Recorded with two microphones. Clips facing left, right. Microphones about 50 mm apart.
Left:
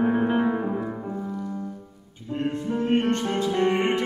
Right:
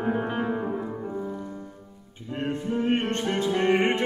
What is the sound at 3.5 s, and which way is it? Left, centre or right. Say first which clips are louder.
Music: right 1 dB; centre.